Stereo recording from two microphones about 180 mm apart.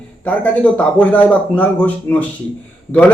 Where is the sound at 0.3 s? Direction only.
10° left (ahead or behind).